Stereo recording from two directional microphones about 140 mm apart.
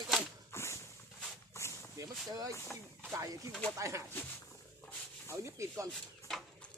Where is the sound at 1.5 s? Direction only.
20° left (ahead or behind).